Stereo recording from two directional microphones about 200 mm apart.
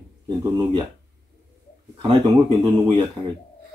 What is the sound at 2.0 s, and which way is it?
Speech, 25° right (ahead or behind).